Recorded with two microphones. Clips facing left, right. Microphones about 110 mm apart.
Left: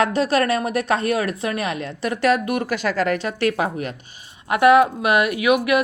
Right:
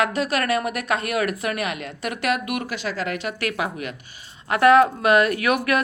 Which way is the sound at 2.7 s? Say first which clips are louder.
Left 6 dB; 45° left (ahead or behind).